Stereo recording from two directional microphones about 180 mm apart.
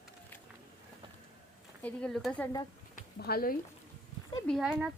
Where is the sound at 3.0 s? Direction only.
60° left (ahead or behind).